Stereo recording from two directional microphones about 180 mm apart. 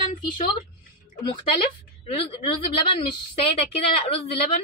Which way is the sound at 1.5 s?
30° left (ahead or behind).